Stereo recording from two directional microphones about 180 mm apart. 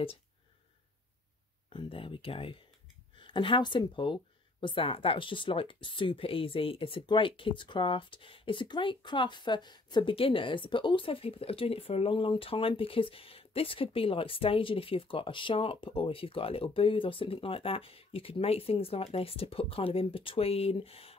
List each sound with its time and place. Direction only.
1.7 s speech: 30° left (ahead or behind)